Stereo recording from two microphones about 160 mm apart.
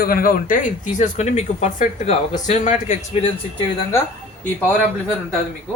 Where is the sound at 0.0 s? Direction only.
65° left (ahead or behind); by 3.3 s 40° left (ahead or behind).